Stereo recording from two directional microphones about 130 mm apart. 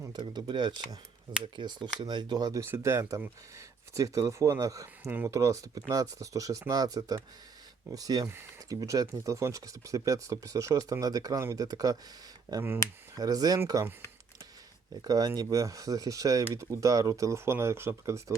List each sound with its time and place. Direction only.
0.1 s speech: 35° right (ahead or behind)
15.0 s speech: 30° right (ahead or behind)